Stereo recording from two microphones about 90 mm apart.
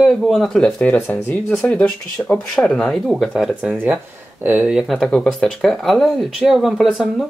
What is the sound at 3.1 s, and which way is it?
Speech, 5° right (ahead or behind).